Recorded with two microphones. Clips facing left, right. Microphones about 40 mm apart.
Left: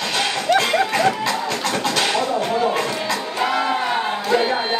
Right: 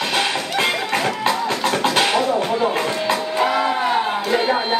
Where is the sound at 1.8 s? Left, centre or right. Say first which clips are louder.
Right 3 dB; right.